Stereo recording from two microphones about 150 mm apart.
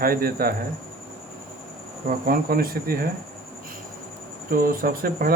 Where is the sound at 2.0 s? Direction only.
75° right (ahead or behind).